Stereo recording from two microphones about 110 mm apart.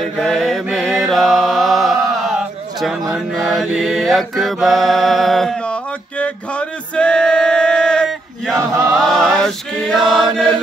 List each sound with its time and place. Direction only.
0.2 s mantra: 5° left (ahead or behind)
7.0 s male singing: 10° left (ahead or behind)
8.5 s chant: 25° right (ahead or behind)
8.9 s chant: 5° left (ahead or behind)